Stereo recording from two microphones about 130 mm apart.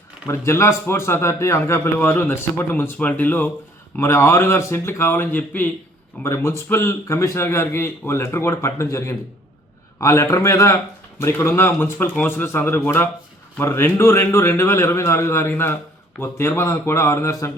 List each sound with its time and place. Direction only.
0.3 s a man's voice: 20° left (ahead or behind)